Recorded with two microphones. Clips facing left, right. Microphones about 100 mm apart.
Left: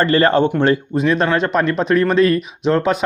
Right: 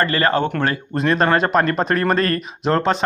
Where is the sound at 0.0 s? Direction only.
30° left (ahead or behind).